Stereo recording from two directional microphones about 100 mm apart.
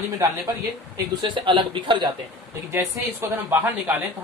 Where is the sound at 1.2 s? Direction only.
55° right (ahead or behind).